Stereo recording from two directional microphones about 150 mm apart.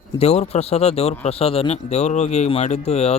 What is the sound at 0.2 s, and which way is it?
Speech, 45° left (ahead or behind).